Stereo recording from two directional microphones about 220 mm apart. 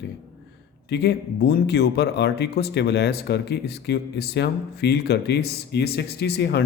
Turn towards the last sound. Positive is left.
turn(degrees=50)  # may be behind; listen again after turning